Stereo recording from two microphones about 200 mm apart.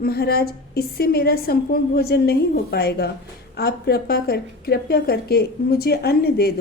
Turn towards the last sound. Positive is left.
turn(degrees=50)  # may be behind; listen again after turning